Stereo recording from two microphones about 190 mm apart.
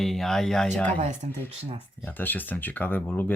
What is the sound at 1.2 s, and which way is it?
Speech, 40° right (ahead or behind).